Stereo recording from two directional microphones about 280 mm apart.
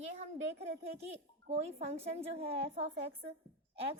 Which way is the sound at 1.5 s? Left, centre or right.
Right.